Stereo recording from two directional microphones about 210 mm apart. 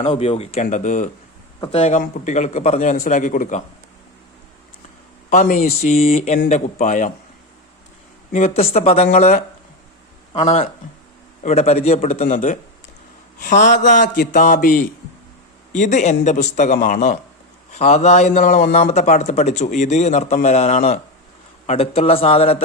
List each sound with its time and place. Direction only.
0.1 s a man's voice: 30° left (ahead or behind)
5.3 s a man's voice: 35° left (ahead or behind)
8.3 s a man's voice: 35° left (ahead or behind)
13.7 s a man's voice: 35° left (ahead or behind)